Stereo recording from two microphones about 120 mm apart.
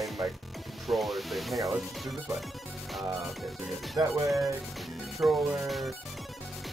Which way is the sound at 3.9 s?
25° right (ahead or behind).